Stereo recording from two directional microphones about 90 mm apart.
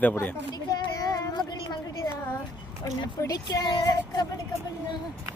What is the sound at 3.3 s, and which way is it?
Speech, 45° left (ahead or behind).